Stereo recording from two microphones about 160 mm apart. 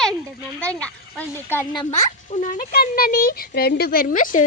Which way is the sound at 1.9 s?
45° left (ahead or behind).